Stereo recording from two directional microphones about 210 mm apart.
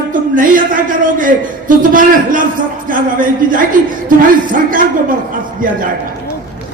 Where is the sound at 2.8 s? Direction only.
40° right (ahead or behind).